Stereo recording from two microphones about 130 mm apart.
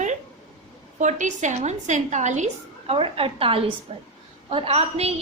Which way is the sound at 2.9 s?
45° right (ahead or behind).